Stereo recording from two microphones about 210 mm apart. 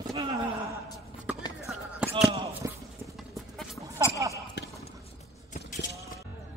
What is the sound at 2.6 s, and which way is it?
Clip-clop, 15° right (ahead or behind).